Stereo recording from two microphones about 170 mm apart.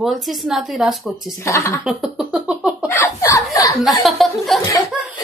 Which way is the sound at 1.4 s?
15° left (ahead or behind).